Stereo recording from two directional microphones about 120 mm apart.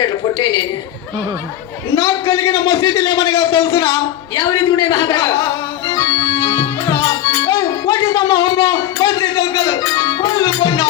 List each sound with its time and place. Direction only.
0.0 s a sound: 30° left (ahead or behind)
2.0 s a man's voice: 25° left (ahead or behind)
5.9 s music: 25° left (ahead or behind)